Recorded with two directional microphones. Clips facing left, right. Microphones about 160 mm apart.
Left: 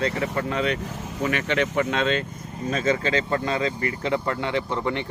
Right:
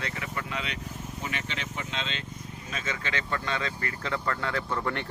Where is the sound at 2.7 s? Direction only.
40° left (ahead or behind).